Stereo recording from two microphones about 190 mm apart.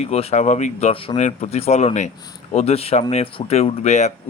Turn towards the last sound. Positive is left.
turn(degrees=35)  # may be behind; listen again after turning